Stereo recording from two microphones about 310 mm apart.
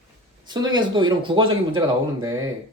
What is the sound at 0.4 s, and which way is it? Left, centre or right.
Speech, centre.